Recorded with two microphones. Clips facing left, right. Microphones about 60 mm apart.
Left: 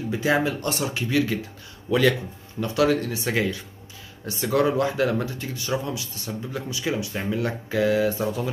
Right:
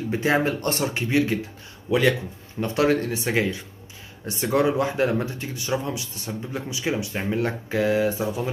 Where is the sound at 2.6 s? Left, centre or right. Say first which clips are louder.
Even; right.